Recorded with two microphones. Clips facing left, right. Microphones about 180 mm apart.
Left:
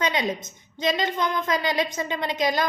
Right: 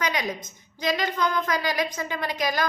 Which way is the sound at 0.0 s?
25° left (ahead or behind).